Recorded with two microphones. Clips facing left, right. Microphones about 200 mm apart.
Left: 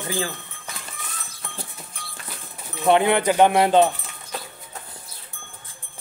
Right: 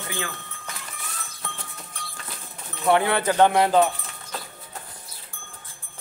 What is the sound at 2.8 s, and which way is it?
Speech, 20° left (ahead or behind).